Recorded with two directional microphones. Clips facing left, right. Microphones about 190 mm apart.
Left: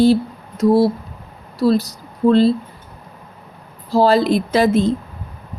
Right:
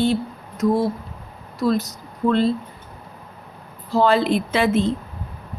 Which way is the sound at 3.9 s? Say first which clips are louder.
Left 4 dB; 35° left (ahead or behind).